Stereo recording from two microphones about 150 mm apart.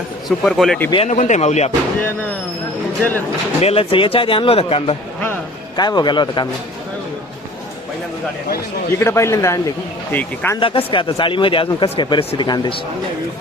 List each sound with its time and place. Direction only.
0.3 s speech: centre (ahead or behind)
1.0 s speech: 50° left (ahead or behind)
3.6 s speech: 40° left (ahead or behind)
5.7 s speech: 30° left (ahead or behind)
9.0 s speech: 20° left (ahead or behind)
10.6 s speech: 35° left (ahead or behind)